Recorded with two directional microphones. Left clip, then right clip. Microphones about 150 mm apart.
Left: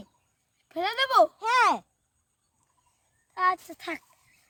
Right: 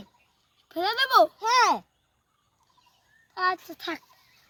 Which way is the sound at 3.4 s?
65° left (ahead or behind).